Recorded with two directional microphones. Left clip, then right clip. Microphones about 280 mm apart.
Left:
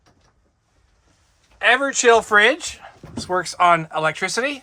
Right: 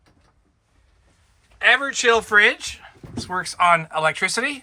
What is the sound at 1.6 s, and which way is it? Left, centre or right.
Speech, left.